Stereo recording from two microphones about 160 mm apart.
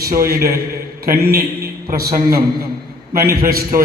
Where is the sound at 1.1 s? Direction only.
75° right (ahead or behind).